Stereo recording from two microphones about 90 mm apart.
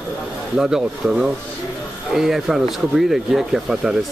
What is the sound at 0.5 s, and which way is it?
Speech, 5° right (ahead or behind).